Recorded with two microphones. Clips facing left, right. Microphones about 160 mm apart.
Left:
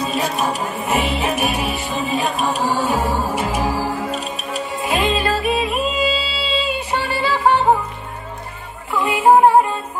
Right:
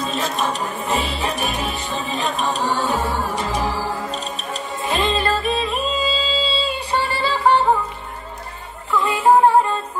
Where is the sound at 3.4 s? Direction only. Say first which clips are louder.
Left 2 dB; 15° left (ahead or behind).